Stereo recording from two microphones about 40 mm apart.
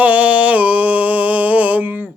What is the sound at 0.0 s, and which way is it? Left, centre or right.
Music, right.